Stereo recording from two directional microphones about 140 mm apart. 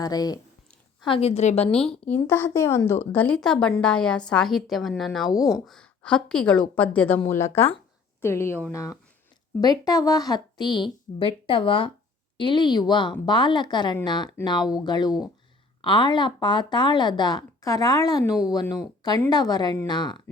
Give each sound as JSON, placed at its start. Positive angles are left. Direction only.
{"t": 0.0, "sound": "a woman's voice", "side_deg": 25}
{"t": 1.0, "sound": "a woman's voice", "side_deg": 45}
{"t": 1.9, "sound": "a woman's voice", "side_deg": 15}